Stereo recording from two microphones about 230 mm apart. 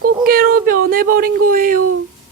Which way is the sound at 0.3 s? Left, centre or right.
Right.